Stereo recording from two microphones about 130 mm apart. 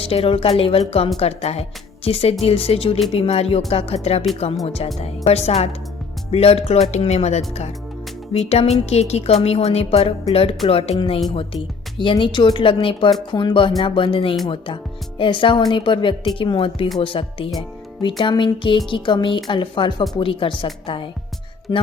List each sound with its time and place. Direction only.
0.0 s a woman's voice: 45° left (ahead or behind)